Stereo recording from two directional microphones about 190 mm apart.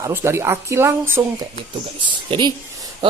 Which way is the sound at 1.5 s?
25° right (ahead or behind).